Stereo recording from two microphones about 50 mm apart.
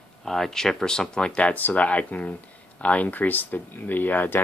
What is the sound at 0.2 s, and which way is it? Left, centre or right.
Speech, centre.